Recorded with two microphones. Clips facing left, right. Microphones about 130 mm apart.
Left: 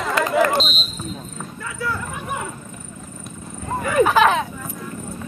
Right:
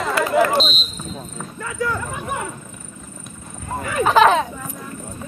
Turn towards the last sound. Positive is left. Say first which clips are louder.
# right 1 dB
turn(degrees=-20)  # may be behind; listen again after turning